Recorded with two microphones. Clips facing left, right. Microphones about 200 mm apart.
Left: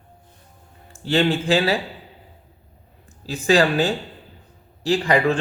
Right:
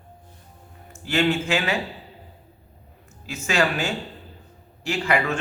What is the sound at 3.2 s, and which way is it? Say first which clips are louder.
A man's voice: left 6 dB; 35° left (ahead or behind).